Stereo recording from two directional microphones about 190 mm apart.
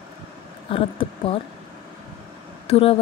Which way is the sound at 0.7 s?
30° left (ahead or behind).